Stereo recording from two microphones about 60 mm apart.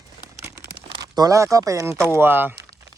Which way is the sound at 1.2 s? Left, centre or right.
Right.